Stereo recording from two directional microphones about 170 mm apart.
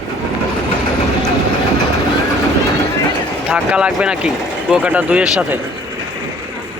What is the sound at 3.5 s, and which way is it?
Speech, 5° right (ahead or behind).